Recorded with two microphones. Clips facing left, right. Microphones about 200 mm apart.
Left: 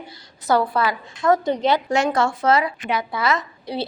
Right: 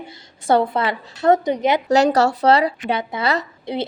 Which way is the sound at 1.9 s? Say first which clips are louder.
Right 5 dB; 40° right (ahead or behind).